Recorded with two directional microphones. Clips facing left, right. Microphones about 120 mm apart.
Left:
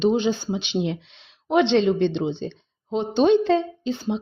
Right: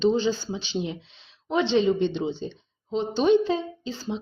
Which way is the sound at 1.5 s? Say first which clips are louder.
Left 3 dB; 70° left (ahead or behind).